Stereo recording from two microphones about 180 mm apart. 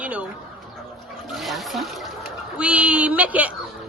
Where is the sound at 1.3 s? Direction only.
Centre (ahead or behind).